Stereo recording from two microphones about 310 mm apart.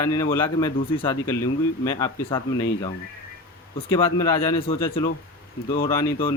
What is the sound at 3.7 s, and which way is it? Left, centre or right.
Speech, centre.